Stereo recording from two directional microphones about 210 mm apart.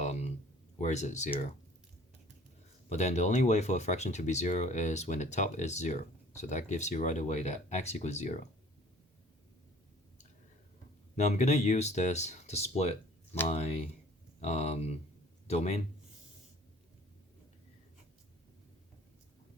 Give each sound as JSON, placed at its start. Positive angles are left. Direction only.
{"t": 0.0, "sound": "a sound", "side_deg": 35}
{"t": 0.8, "sound": "speech", "side_deg": 35}
{"t": 2.9, "sound": "speech", "side_deg": 30}
{"t": 11.1, "sound": "speech", "side_deg": 35}